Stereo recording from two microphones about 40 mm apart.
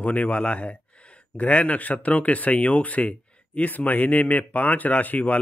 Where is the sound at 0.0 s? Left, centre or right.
Left.